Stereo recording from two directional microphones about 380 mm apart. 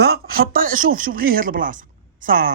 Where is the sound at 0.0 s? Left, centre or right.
Right.